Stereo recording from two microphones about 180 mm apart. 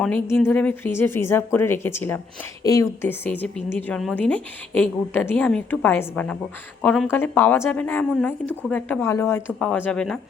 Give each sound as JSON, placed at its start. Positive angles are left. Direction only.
{"t": 0.0, "sound": "a woman's voice", "side_deg": 5}